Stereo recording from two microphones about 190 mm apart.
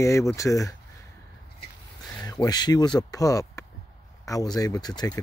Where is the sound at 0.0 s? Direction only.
15° left (ahead or behind).